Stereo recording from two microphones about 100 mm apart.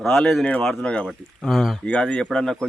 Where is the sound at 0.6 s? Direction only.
5° left (ahead or behind).